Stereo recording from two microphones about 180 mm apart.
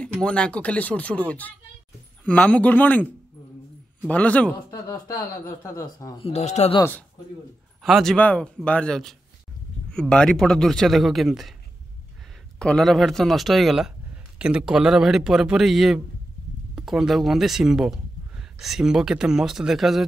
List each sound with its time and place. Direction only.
0.0 s speech: 5° left (ahead or behind)
4.1 s speech: 10° left (ahead or behind)
4.6 s speech: 20° left (ahead or behind)
6.2 s speech: 35° left (ahead or behind)
6.8 s a man's voice: 10° left (ahead or behind)
12.5 s a man's voice: 5° left (ahead or behind)